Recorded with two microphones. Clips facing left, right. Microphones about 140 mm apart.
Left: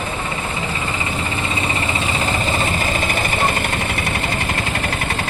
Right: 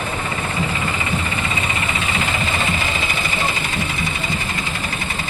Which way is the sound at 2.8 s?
50° left (ahead or behind).